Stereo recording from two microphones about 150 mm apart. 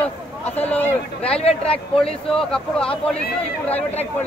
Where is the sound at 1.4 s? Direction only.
40° left (ahead or behind).